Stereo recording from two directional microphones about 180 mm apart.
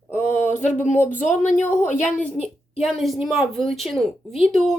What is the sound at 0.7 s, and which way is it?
Speech, 40° left (ahead or behind).